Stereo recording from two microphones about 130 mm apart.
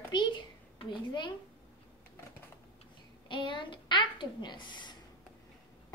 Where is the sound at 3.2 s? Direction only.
40° left (ahead or behind).